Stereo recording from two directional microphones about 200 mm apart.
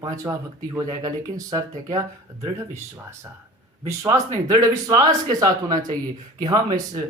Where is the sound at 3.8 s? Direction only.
15° right (ahead or behind).